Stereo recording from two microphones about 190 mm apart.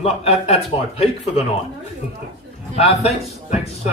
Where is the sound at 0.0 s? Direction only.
35° left (ahead or behind).